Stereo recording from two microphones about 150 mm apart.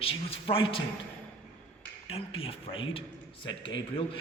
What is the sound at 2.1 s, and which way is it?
A man's voice, 40° left (ahead or behind).